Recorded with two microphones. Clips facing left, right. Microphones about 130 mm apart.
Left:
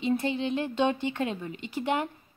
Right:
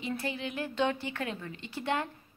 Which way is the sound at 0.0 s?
20° left (ahead or behind).